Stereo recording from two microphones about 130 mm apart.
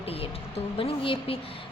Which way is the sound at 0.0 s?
50° left (ahead or behind).